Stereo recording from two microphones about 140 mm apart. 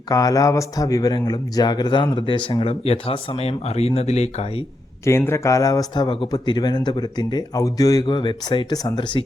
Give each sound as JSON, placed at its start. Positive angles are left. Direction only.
{"t": 0.1, "sound": "speech", "side_deg": 25}
{"t": 5.0, "sound": "speech", "side_deg": 20}